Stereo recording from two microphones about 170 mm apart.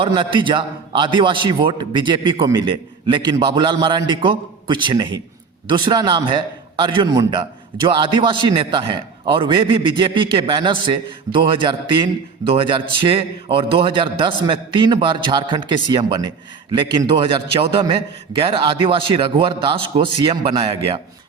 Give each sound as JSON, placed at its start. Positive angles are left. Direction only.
{"t": 0.0, "sound": "a man's voice", "side_deg": -30}